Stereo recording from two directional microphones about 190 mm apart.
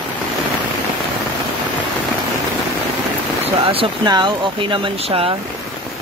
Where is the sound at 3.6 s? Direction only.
25° right (ahead or behind).